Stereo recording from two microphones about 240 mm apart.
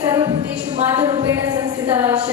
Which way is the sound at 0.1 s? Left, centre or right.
Centre.